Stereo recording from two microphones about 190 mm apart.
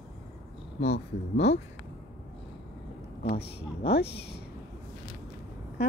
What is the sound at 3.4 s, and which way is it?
Speech, 60° left (ahead or behind).